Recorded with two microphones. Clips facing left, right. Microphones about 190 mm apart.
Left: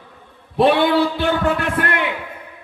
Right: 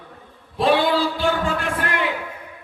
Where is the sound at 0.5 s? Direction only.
60° left (ahead or behind).